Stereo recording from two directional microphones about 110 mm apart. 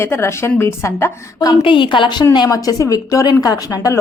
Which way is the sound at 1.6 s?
50° left (ahead or behind).